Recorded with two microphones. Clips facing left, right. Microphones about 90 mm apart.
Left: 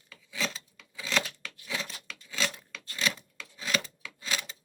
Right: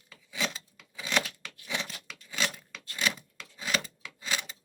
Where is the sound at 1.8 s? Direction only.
10° right (ahead or behind).